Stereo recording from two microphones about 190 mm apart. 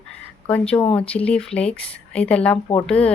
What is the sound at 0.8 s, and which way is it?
Speech, 30° left (ahead or behind).